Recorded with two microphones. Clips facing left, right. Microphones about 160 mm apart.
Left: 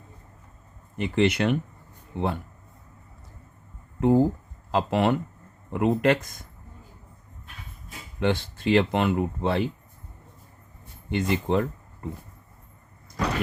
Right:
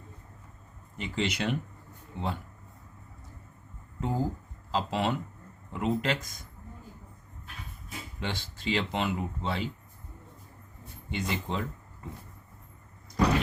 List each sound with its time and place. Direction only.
0.9 s speech: 60° left (ahead or behind)
4.0 s speech: 60° left (ahead or behind)
8.2 s speech: 55° left (ahead or behind)
11.1 s speech: 55° left (ahead or behind)